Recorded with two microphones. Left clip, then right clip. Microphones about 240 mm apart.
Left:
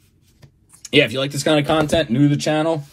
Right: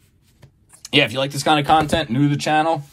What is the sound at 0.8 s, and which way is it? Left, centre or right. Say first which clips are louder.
Speech: left 1 dB; centre.